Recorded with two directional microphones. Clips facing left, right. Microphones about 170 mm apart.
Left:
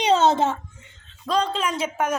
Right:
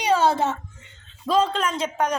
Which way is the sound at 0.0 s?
20° left (ahead or behind).